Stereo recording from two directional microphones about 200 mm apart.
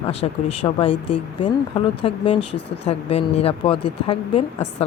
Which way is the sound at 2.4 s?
60° left (ahead or behind).